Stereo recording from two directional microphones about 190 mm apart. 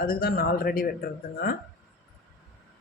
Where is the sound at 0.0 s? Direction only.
50° left (ahead or behind).